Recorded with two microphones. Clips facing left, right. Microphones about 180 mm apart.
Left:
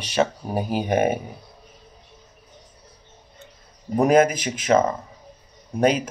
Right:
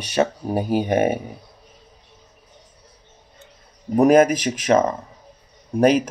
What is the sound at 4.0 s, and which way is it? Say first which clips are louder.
Speech: right 3 dB; 40° right (ahead or behind).